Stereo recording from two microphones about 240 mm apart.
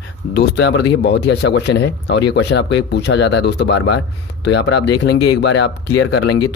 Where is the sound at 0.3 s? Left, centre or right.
Left.